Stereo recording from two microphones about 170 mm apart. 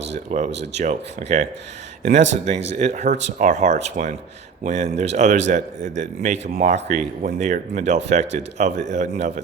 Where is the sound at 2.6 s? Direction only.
40° right (ahead or behind).